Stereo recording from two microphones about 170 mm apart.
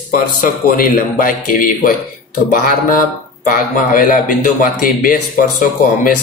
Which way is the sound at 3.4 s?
55° left (ahead or behind).